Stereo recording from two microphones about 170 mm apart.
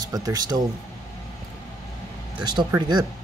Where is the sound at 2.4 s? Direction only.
25° right (ahead or behind).